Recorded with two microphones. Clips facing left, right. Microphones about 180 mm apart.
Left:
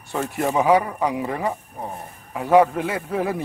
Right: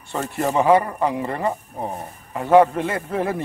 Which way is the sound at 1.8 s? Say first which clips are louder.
Right 4 dB; 25° right (ahead or behind).